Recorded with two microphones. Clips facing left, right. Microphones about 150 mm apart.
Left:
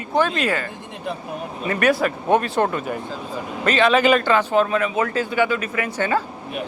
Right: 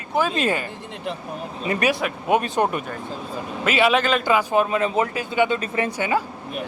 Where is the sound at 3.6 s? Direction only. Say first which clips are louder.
Left 2 dB; 5° right (ahead or behind); by 5.9 s 30° right (ahead or behind).